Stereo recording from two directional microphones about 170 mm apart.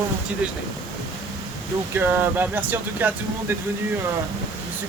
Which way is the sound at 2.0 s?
10° right (ahead or behind).